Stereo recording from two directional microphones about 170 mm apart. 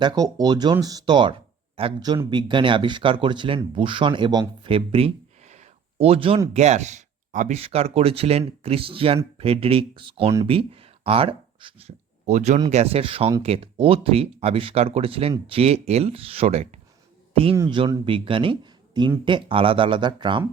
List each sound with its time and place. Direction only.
0.0 s speech: 25° right (ahead or behind); by 16.8 s 40° right (ahead or behind)
17.7 s speech: 25° right (ahead or behind)